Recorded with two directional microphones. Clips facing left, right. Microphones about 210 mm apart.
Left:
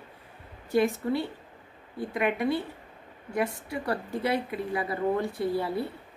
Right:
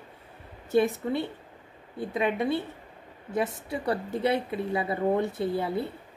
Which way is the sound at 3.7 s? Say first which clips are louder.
Right 2 dB; 20° right (ahead or behind).